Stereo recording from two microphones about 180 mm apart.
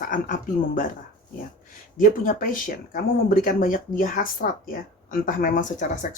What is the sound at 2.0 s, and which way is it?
Speech, 50° left (ahead or behind).